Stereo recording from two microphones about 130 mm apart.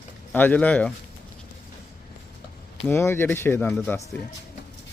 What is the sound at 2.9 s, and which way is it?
Speech, 15° left (ahead or behind).